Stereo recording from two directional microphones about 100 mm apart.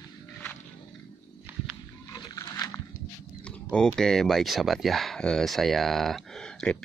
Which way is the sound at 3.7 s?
10° left (ahead or behind).